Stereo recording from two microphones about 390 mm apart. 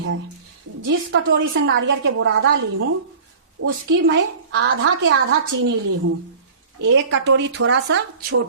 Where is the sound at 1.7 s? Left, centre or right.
Right.